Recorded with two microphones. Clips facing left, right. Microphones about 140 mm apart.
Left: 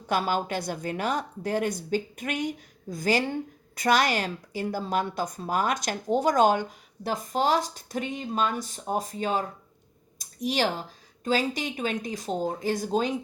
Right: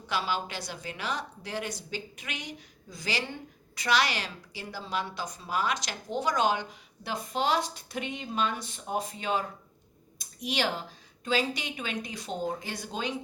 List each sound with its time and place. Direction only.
0.1 s a woman's voice: 50° left (ahead or behind)
10.2 s a sound: 40° left (ahead or behind)
11.2 s speech: 40° left (ahead or behind)